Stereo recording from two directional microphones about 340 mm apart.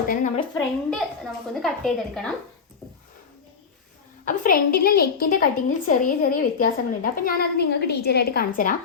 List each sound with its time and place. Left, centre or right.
0.1 s a woman's voice: left
0.5 s a woman's voice: centre
4.3 s a woman's voice: left